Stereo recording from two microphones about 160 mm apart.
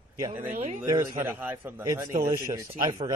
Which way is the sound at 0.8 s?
20° right (ahead or behind).